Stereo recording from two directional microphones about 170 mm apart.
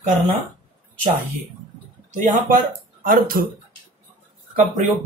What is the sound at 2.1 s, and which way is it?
Speech, 50° right (ahead or behind).